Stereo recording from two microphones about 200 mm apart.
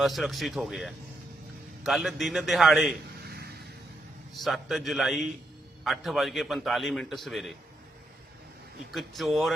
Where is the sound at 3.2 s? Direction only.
55° right (ahead or behind).